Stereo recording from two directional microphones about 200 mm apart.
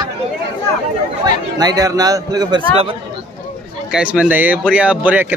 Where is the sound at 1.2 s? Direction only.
20° right (ahead or behind).